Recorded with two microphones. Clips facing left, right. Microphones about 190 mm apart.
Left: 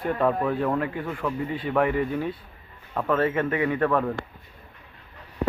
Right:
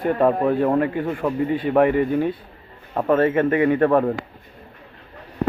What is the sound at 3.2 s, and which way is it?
Speech, 50° right (ahead or behind).